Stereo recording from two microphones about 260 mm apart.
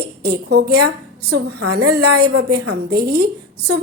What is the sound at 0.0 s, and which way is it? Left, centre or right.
A woman's voice, right.